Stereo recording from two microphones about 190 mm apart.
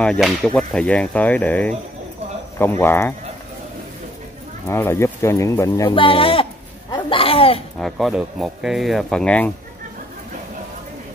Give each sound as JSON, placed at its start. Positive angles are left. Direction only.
{"t": 0.0, "sound": "speech", "side_deg": 5}
{"t": 4.6, "sound": "speech", "side_deg": 15}
{"t": 6.9, "sound": "a sound", "side_deg": 30}
{"t": 7.8, "sound": "speech", "side_deg": 0}